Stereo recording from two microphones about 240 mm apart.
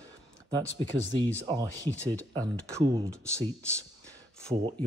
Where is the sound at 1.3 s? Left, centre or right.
Centre.